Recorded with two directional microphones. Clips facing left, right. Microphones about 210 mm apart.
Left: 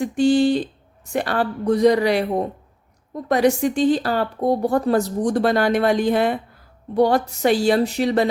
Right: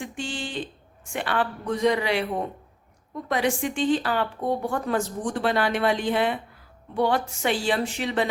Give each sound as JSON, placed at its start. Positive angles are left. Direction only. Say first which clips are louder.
{"t": 0.0, "sound": "a woman's voice", "louder": "left 16 dB", "side_deg": 40}